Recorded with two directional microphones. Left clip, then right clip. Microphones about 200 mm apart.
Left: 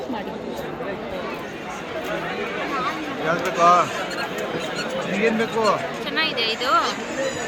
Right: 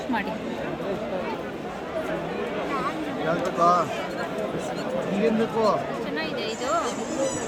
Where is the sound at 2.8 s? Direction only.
35° left (ahead or behind).